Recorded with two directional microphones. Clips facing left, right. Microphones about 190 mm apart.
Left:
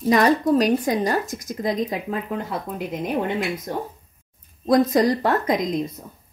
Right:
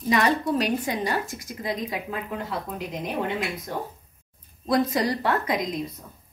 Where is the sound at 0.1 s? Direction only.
40° left (ahead or behind).